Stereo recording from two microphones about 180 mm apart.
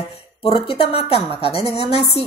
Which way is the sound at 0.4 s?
30° left (ahead or behind).